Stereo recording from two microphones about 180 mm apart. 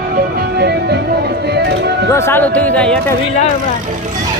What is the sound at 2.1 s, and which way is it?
Speech, 15° left (ahead or behind).